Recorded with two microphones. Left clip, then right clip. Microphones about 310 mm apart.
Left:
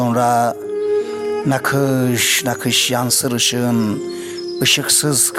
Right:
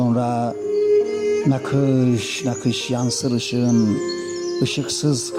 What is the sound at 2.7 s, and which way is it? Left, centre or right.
Speech, left.